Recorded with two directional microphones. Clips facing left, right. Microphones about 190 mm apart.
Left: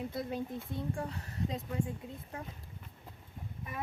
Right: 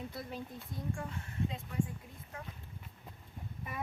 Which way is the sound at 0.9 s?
40° left (ahead or behind).